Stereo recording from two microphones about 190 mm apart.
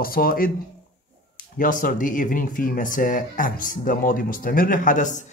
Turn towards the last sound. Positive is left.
turn(degrees=40)  # may be behind; listen again after turning